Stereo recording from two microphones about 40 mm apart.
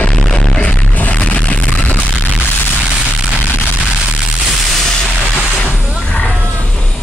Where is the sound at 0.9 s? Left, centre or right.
Left.